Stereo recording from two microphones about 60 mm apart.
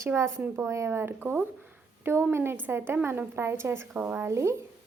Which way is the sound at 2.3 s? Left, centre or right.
Right.